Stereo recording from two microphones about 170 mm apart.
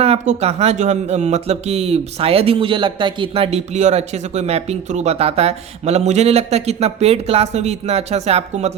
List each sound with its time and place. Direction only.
0.0 s speech: 40° right (ahead or behind)